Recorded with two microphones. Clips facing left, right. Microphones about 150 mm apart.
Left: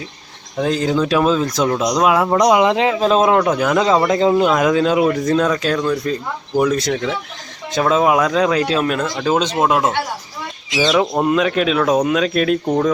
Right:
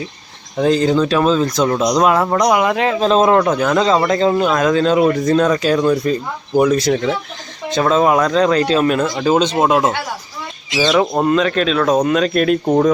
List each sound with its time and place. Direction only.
0.5 s speech: centre (ahead or behind); by 2.9 s 20° left (ahead or behind)
2.9 s speech: 5° left (ahead or behind)
5.7 s speech: 15° right (ahead or behind)
6.6 s speech: 5° right (ahead or behind)
11.2 s speech: 10° left (ahead or behind)
12.6 s speech: 15° right (ahead or behind)